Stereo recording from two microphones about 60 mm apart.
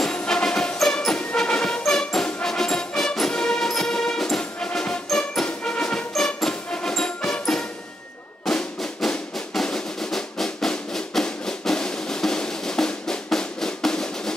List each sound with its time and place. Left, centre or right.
0.0 s music: centre
8.5 s music: centre